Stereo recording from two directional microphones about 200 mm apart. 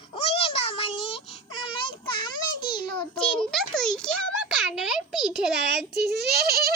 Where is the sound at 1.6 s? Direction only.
25° left (ahead or behind).